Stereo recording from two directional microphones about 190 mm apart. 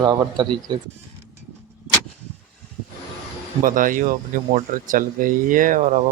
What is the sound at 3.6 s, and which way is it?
Speech, 45° right (ahead or behind).